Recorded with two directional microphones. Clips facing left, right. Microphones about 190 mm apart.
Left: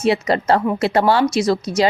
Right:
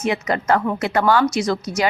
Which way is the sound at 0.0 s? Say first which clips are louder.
Left 4 dB; 30° left (ahead or behind).